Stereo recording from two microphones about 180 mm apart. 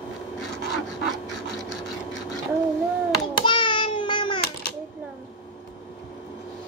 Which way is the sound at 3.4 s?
25° left (ahead or behind).